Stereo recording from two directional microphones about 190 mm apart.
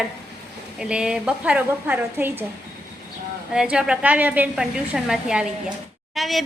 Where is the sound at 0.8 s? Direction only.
5° right (ahead or behind).